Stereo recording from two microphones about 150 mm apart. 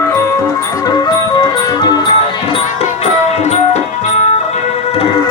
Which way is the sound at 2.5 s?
45° left (ahead or behind).